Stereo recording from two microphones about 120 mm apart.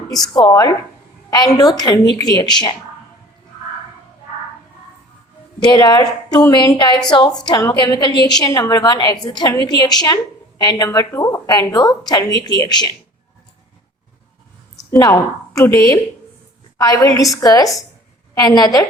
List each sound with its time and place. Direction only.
0.1 s a woman's voice: 35° left (ahead or behind)
5.6 s a woman's voice: 35° left (ahead or behind)
14.8 s speech: 25° left (ahead or behind)
17.0 s a woman's voice: 30° left (ahead or behind)